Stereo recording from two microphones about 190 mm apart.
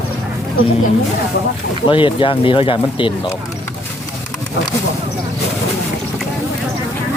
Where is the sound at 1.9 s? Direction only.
25° left (ahead or behind).